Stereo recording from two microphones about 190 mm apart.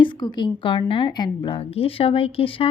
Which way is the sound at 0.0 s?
25° left (ahead or behind).